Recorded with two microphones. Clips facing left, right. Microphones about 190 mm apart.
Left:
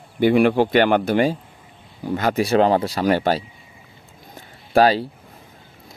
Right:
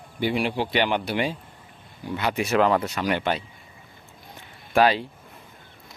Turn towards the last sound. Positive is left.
turn(degrees=35)  # may be behind; listen again after turning